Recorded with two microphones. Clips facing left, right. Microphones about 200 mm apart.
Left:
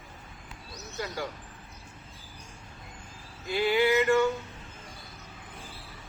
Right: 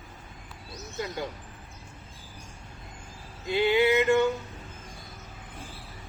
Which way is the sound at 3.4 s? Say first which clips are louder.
Right 2 dB; 20° right (ahead or behind).